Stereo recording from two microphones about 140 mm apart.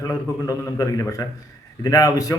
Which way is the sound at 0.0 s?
25° left (ahead or behind).